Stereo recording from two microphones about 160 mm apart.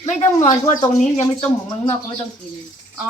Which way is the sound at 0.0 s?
50° left (ahead or behind).